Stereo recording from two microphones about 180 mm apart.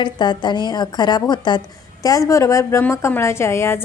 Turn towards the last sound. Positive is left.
turn(degrees=15)  # may be behind; listen again after turning